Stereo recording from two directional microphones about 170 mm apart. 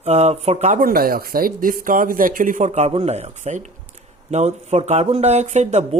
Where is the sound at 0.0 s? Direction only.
40° right (ahead or behind).